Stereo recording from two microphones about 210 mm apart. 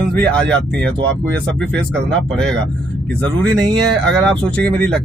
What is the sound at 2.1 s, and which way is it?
Speech, 5° left (ahead or behind).